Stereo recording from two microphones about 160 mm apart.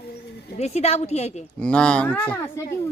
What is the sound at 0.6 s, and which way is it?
Speech, 40° left (ahead or behind).